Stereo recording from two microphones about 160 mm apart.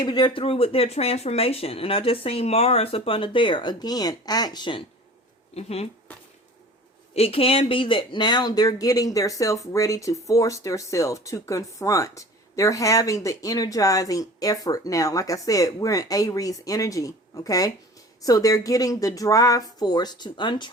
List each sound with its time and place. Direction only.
0.0 s speech: 25° left (ahead or behind)
5.5 s speech: 40° left (ahead or behind)
7.2 s speech: 35° left (ahead or behind)